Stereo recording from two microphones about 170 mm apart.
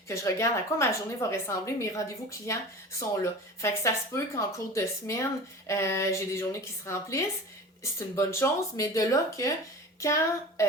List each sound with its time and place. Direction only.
0.1 s a woman's voice: 15° left (ahead or behind)
3.6 s a woman's voice: 15° left (ahead or behind)